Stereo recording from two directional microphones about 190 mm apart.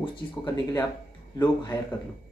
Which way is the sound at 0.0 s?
25° left (ahead or behind).